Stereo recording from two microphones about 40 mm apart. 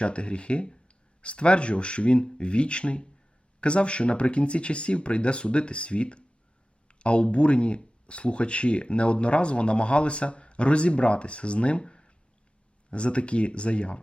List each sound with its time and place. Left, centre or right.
0.0 s speech: left